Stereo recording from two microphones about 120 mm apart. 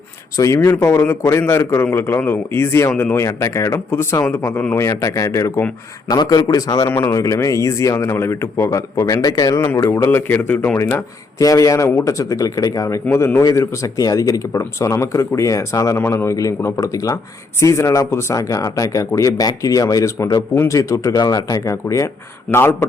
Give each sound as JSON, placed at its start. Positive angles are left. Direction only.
{"t": 0.3, "sound": "a man's voice", "side_deg": 25}
{"t": 6.9, "sound": "speech", "side_deg": 20}